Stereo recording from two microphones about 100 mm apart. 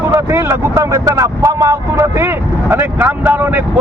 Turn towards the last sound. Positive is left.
turn(degrees=-20)  # may be behind; listen again after turning